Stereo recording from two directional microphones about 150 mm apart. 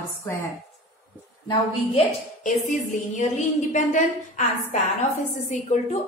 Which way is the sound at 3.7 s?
55° left (ahead or behind).